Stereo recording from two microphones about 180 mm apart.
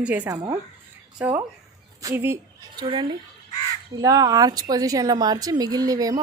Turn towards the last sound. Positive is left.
turn(degrees=-20)  # may be behind; listen again after turning